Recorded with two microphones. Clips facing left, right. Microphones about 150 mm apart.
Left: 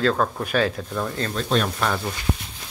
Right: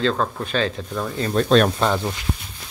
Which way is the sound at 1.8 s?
25° right (ahead or behind).